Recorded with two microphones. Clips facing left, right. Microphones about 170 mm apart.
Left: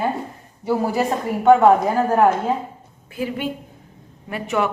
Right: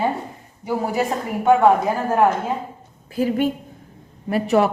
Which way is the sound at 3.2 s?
40° right (ahead or behind).